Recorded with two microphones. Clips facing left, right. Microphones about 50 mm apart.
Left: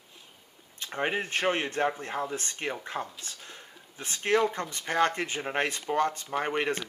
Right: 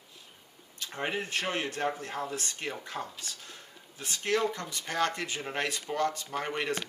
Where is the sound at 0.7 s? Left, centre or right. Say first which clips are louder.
Left 4 dB; left.